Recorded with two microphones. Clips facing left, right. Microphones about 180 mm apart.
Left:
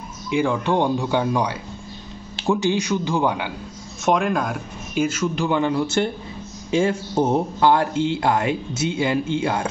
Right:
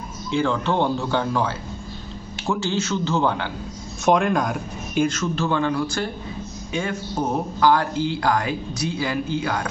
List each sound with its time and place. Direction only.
0.3 s a man's voice: 15° left (ahead or behind)
4.0 s a man's voice: centre (ahead or behind); by 9.7 s 25° left (ahead or behind)